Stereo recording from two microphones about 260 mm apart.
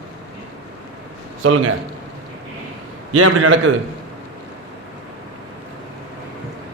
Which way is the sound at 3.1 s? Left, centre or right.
Right.